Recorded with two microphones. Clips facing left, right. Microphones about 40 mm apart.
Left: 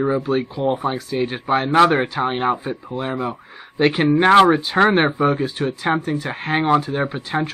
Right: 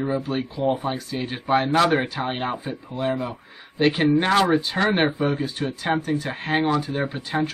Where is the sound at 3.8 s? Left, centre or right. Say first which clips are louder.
Left 3 dB; left.